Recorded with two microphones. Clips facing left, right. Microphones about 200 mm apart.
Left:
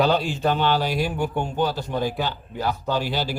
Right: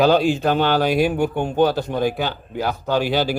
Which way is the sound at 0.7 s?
55° right (ahead or behind).